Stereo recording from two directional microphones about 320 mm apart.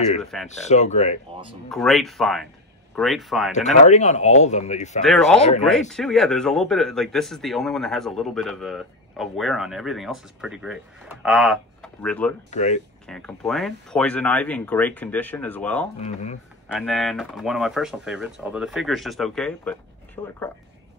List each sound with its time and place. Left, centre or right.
0.2 s a man's voice: centre
0.5 s speech: left
1.7 s a man's voice: centre
3.8 s speech: left
5.0 s a man's voice: centre
12.4 s speech: left
13.0 s a man's voice: centre
16.0 s speech: left
16.7 s a man's voice: centre